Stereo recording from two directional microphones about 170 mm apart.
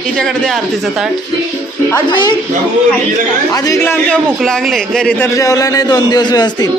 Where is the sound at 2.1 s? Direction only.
25° left (ahead or behind).